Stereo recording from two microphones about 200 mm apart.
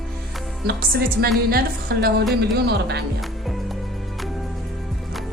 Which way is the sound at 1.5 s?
50° right (ahead or behind).